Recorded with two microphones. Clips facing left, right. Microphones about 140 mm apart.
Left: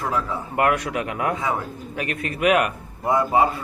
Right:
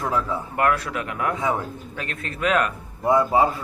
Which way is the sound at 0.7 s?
65° left (ahead or behind).